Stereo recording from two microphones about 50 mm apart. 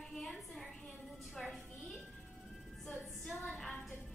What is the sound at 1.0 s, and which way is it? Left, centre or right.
Music, centre.